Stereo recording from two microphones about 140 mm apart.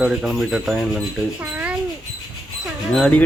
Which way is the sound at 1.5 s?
10° right (ahead or behind).